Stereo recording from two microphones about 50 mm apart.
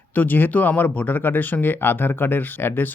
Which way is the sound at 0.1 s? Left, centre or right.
Left.